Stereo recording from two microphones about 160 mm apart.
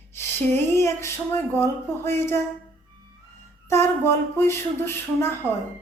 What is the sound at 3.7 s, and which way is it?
Speech, 15° left (ahead or behind).